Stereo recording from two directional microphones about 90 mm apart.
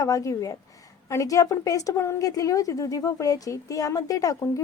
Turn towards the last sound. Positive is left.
turn(degrees=40)  # may be behind; listen again after turning